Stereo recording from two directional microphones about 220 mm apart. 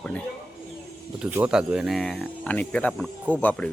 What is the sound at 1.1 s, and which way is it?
Speech, 5° right (ahead or behind).